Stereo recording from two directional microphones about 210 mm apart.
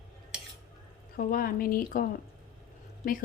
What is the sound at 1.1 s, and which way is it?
Speech, 45° left (ahead or behind).